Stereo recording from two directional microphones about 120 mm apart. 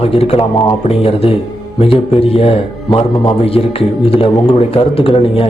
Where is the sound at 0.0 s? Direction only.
55° left (ahead or behind).